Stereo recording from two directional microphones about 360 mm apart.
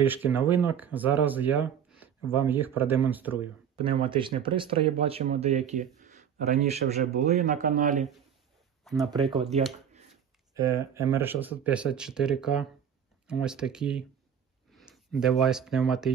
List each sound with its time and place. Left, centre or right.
0.0 s speech: centre; by 8.1 s right
8.8 s speech: centre
9.2 s speech: centre
10.5 s speech: centre